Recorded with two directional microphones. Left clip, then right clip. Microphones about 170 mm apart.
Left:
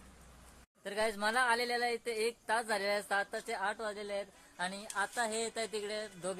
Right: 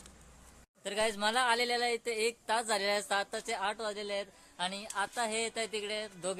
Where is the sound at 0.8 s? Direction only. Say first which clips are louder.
Right 2 dB; 20° right (ahead or behind).